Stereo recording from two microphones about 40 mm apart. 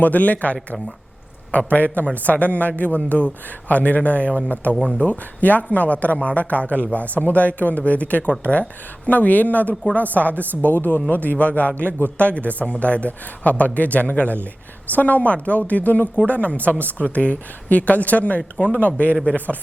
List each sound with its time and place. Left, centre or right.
0.0 s a man's voice: left